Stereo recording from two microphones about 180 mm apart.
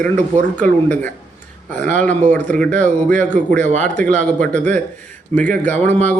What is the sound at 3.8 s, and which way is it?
A man's voice, 5° left (ahead or behind).